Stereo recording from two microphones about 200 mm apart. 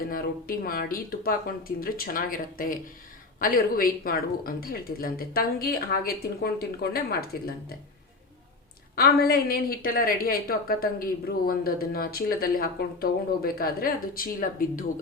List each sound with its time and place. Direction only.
0.1 s a woman's voice: 45° left (ahead or behind)
9.0 s a woman's voice: 50° left (ahead or behind)